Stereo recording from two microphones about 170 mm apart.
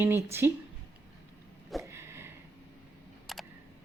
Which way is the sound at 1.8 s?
15° right (ahead or behind).